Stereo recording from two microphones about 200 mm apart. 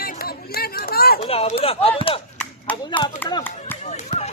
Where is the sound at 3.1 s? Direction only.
15° left (ahead or behind).